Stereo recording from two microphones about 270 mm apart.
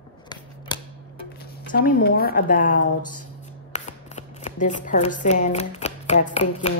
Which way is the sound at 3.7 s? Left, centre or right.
Left.